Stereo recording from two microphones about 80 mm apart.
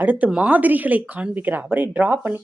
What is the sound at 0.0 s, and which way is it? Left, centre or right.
Speech, centre.